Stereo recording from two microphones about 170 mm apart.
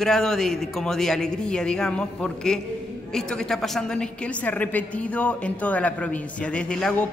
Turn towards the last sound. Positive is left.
turn(degrees=5)  # may be behind; listen again after turning